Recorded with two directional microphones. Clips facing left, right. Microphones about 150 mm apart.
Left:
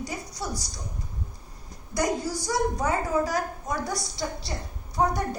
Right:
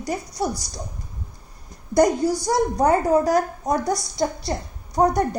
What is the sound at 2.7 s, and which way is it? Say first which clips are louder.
A woman's voice: right 8 dB; 40° right (ahead or behind).